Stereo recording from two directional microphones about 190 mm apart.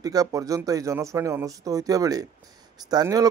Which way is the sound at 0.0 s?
20° right (ahead or behind).